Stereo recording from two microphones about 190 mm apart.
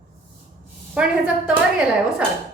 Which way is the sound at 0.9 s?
5° right (ahead or behind).